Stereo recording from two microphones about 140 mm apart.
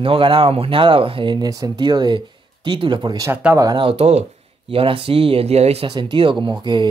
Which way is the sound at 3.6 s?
30° right (ahead or behind).